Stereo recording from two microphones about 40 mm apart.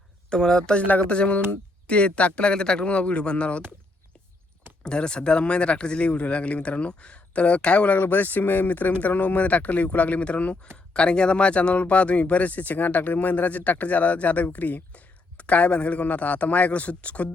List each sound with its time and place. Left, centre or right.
0.3 s speech: centre
4.8 s speech: left
7.9 s speech: left